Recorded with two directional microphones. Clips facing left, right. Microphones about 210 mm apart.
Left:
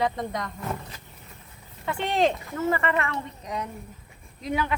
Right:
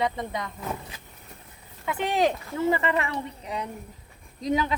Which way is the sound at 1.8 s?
5° right (ahead or behind).